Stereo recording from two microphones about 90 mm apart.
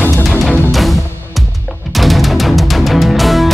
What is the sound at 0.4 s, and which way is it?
Music, centre (ahead or behind).